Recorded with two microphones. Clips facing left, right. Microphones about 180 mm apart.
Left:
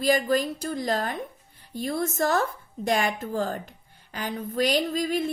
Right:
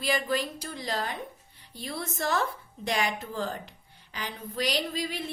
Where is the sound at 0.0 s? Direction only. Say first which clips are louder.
Left 6 dB; 45° left (ahead or behind).